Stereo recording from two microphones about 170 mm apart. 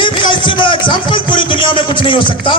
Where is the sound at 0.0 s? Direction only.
30° left (ahead or behind).